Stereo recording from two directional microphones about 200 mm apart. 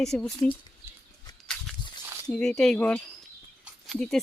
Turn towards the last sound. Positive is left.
turn(degrees=0)  # may be behind; listen again after turning